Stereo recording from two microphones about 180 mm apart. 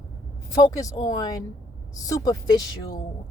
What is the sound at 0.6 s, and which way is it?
Speech, 20° left (ahead or behind).